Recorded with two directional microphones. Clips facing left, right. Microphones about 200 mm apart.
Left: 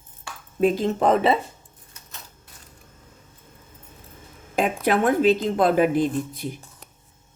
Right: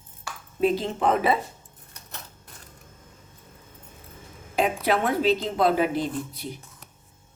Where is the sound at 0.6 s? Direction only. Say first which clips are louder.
Left 3 dB; 45° left (ahead or behind); by 1.4 s 30° left (ahead or behind).